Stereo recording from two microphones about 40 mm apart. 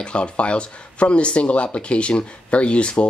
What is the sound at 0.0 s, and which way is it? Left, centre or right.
Speech, left.